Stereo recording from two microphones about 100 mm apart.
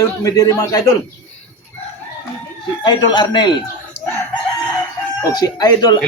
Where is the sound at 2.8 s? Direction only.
45° left (ahead or behind).